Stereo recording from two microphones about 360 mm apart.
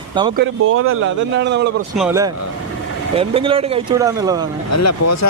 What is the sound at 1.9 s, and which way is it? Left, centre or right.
Speech, centre.